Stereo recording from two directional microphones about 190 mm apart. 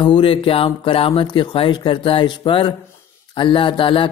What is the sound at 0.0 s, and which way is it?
Speech, 25° left (ahead or behind).